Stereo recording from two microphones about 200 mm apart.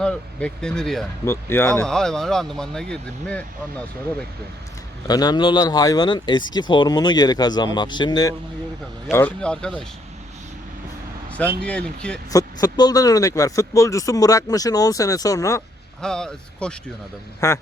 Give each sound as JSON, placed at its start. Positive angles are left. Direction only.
{"t": 0.0, "sound": "speech", "side_deg": 5}
{"t": 5.0, "sound": "speech", "side_deg": 20}
{"t": 9.1, "sound": "speech", "side_deg": 5}
{"t": 11.3, "sound": "speech", "side_deg": 5}
{"t": 12.3, "sound": "speech", "side_deg": 20}
{"t": 16.0, "sound": "speech", "side_deg": 5}
{"t": 17.4, "sound": "speech", "side_deg": 15}